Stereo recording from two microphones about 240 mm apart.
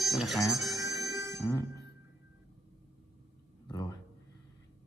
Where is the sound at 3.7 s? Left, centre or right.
Centre.